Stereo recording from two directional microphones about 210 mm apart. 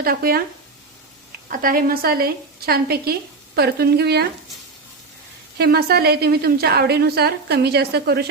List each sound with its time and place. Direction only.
0.0 s a woman's voice: 45° right (ahead or behind)
1.5 s a woman's voice: 45° right (ahead or behind)
5.5 s a woman's voice: 50° right (ahead or behind)